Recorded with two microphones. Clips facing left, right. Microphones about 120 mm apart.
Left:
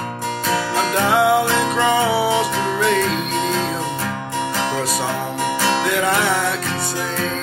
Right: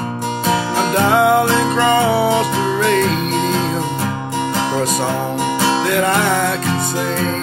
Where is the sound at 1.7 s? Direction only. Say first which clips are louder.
Right 2 dB; 10° left (ahead or behind).